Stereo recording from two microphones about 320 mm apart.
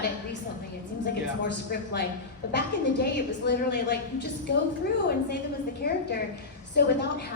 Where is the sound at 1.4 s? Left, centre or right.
Left.